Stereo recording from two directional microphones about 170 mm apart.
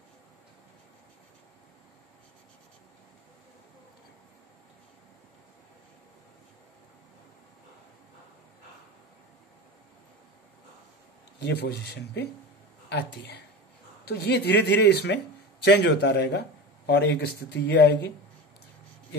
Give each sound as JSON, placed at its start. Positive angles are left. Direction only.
{"t": 11.3, "sound": "speech", "side_deg": 80}
{"t": 17.6, "sound": "speech", "side_deg": 90}